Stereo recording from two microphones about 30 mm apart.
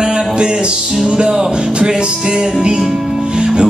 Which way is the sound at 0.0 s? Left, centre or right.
Right.